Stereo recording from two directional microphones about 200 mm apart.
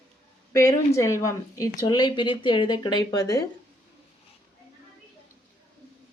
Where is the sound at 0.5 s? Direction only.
15° left (ahead or behind).